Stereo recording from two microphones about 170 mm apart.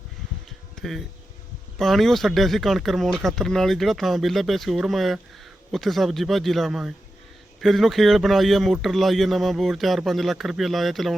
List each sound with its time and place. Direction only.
0.8 s speech: centre (ahead or behind)